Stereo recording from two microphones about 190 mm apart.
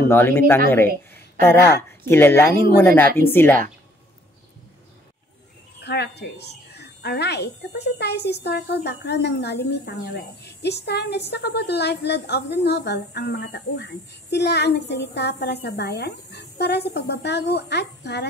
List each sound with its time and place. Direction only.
0.1 s speech: 10° left (ahead or behind)
5.8 s a woman's voice: 60° left (ahead or behind)